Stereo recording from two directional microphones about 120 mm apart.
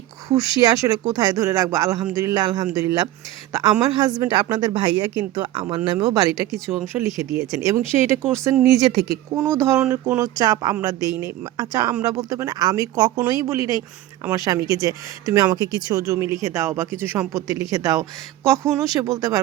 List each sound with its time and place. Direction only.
0.3 s speech: 35° right (ahead or behind)